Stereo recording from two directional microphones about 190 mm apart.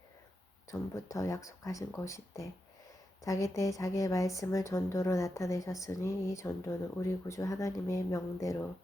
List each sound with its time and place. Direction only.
0.7 s a woman's voice: 15° left (ahead or behind)